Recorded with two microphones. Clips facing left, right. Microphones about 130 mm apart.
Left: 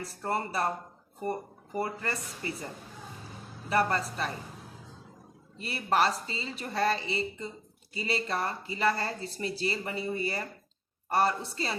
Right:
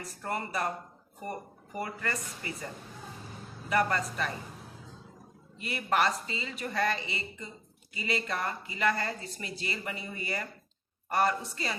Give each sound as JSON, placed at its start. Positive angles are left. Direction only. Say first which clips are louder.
{"t": 0.0, "sound": "speech", "louder": "left 3 dB", "side_deg": 30}
{"t": 3.7, "sound": "speech", "louder": "left 1 dB", "side_deg": 30}
{"t": 5.5, "sound": "speech", "louder": "left 2 dB", "side_deg": 30}